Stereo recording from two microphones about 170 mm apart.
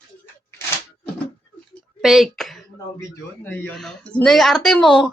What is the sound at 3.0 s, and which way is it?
Speech, 15° left (ahead or behind).